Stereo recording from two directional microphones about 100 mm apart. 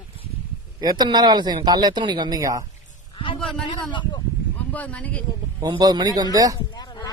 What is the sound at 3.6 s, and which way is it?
Speech, 50° left (ahead or behind).